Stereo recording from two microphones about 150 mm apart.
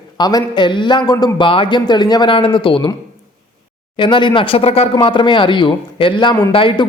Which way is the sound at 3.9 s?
30° left (ahead or behind).